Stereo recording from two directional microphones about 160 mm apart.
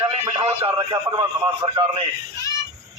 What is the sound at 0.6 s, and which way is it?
Speech, 20° right (ahead or behind).